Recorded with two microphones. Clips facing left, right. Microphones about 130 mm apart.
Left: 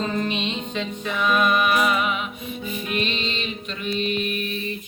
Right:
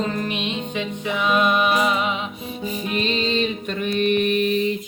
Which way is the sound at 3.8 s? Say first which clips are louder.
Right 6 dB; 55° right (ahead or behind).